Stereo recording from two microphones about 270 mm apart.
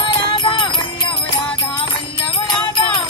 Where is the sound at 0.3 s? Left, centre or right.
Centre.